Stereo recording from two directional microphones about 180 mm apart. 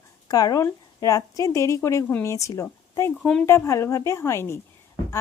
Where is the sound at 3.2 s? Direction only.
5° left (ahead or behind).